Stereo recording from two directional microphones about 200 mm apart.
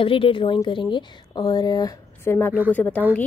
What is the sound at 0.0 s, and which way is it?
A woman's voice, 25° left (ahead or behind).